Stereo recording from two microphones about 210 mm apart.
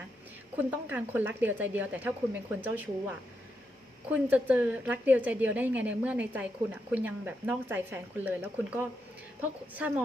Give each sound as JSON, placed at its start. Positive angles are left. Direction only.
{"t": 0.5, "sound": "a woman's voice", "side_deg": -5}